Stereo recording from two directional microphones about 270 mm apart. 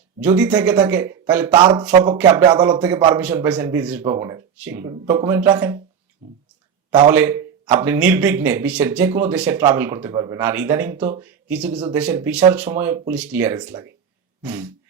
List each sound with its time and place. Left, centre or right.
0.2 s speech: centre
1.5 s speech: centre
6.9 s speech: centre
11.7 s speech: centre